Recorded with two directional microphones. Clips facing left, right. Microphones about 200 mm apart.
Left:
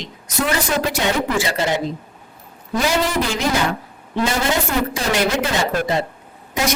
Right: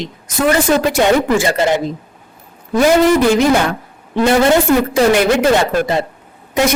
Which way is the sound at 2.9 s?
55° right (ahead or behind).